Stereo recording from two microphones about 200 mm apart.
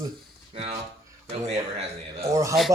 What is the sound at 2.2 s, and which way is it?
Speech, 15° right (ahead or behind).